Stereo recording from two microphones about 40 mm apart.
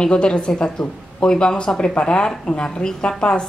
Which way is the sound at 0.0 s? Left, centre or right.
Left.